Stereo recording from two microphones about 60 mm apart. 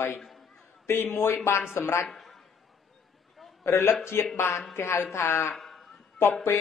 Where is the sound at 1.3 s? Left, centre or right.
Left.